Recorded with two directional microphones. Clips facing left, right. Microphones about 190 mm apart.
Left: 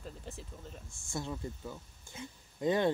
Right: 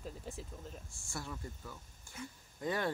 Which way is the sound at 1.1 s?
20° left (ahead or behind).